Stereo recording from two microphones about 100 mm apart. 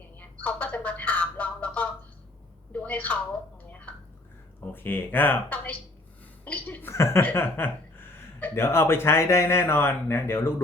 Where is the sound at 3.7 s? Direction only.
15° left (ahead or behind).